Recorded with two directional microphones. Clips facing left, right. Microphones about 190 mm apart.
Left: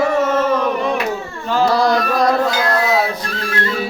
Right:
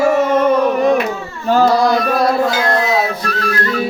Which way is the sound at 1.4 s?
45° right (ahead or behind).